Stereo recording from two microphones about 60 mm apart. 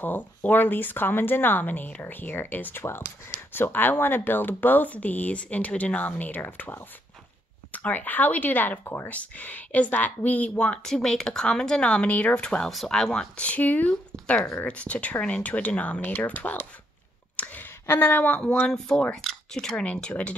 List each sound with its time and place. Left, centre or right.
0.0 s speech: left
12.4 s speech: centre
13.4 s speech: left
17.4 s a sound: left
18.3 s speech: centre
18.7 s speech: centre
19.2 s a sound: centre
19.8 s speech: centre